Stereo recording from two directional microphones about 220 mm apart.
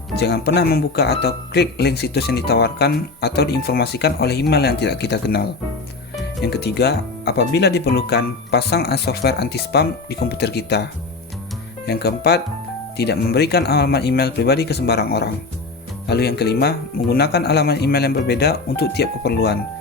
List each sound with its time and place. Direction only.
0.2 s speech: 45° left (ahead or behind)
11.9 s speech: 50° left (ahead or behind)